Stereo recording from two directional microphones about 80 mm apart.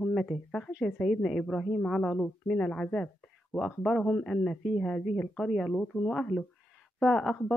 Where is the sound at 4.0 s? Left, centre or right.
Centre.